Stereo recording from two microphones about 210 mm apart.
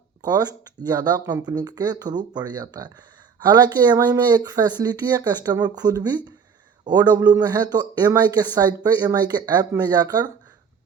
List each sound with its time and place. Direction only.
0.2 s speech: 20° right (ahead or behind)